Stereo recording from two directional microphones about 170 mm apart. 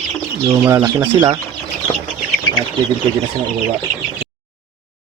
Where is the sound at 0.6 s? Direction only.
15° right (ahead or behind).